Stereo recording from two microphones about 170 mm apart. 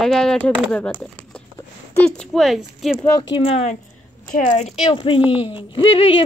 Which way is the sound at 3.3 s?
35° left (ahead or behind).